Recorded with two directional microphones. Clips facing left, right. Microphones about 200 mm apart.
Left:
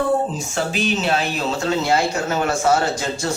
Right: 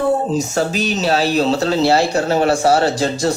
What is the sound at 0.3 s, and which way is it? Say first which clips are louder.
Speech: right 5 dB; 40° right (ahead or behind).